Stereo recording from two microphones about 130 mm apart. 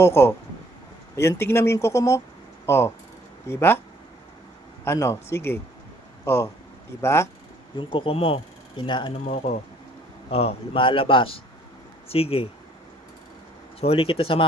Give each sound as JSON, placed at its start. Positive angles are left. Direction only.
{"t": 0.0, "sound": "speech", "side_deg": 20}
{"t": 4.9, "sound": "speech", "side_deg": 20}
{"t": 7.8, "sound": "speech", "side_deg": 40}
{"t": 9.2, "sound": "a man's voice", "side_deg": 55}
{"t": 13.8, "sound": "a man's voice", "side_deg": 45}